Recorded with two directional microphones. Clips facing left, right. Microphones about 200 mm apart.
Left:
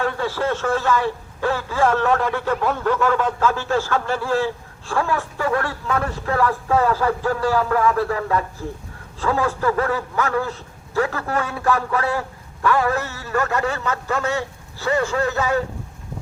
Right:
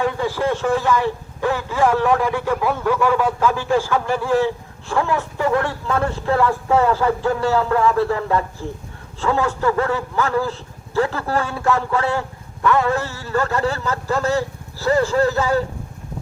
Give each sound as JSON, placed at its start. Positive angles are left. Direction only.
{"t": 0.0, "sound": "a man's voice", "side_deg": -15}